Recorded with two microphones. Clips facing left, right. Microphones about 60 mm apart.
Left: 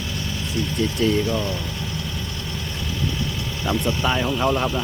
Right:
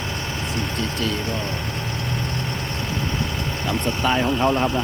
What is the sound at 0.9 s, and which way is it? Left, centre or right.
Speech, left.